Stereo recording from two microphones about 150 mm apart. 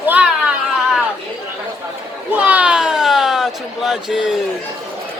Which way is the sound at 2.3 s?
10° right (ahead or behind).